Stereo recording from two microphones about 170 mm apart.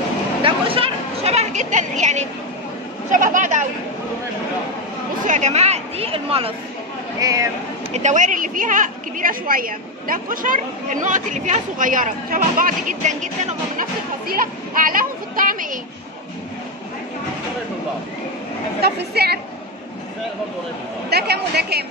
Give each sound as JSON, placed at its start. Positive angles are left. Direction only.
{"t": 0.4, "sound": "a sound", "side_deg": -30}
{"t": 3.3, "sound": "a woman's voice", "side_deg": -45}
{"t": 5.2, "sound": "speech", "side_deg": -45}
{"t": 7.2, "sound": "speech", "side_deg": -20}
{"t": 7.9, "sound": "a woman's voice", "side_deg": -45}
{"t": 14.2, "sound": "speech", "side_deg": -55}
{"t": 18.8, "sound": "a woman's voice", "side_deg": -70}
{"t": 21.1, "sound": "a woman's voice", "side_deg": -70}